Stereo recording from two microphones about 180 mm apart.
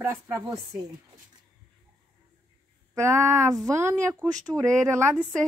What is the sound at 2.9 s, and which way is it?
Speech, 15° right (ahead or behind).